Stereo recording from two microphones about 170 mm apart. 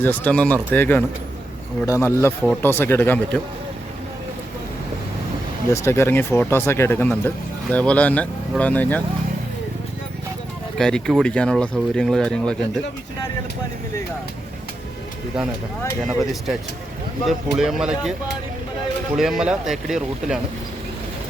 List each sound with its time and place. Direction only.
0.0 s speech: 10° left (ahead or behind)
5.7 s speech: 15° left (ahead or behind)
10.8 s speech: 5° left (ahead or behind)
16.0 s speech: centre (ahead or behind)
19.1 s speech: centre (ahead or behind)